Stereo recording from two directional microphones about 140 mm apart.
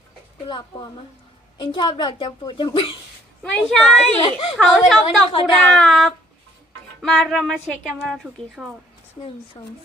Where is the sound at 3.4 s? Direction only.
5° left (ahead or behind).